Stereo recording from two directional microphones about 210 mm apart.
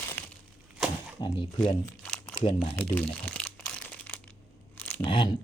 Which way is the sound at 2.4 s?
25° left (ahead or behind).